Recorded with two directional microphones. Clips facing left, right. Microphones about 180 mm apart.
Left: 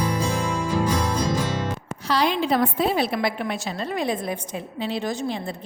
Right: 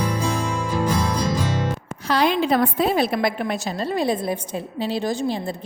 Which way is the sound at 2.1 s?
55° right (ahead or behind).